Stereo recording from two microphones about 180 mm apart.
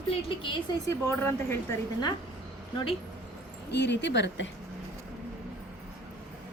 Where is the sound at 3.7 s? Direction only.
70° left (ahead or behind).